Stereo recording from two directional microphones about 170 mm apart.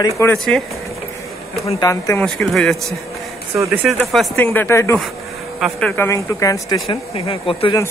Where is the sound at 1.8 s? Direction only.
20° left (ahead or behind).